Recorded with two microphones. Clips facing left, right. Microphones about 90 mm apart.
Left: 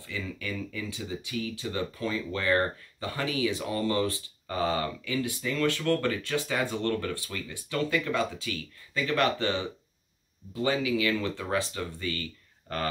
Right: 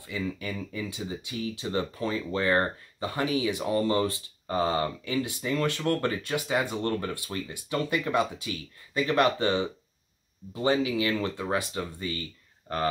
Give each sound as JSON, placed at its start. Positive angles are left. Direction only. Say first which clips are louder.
{"t": 0.0, "sound": "speech", "louder": "right 3 dB", "side_deg": -20}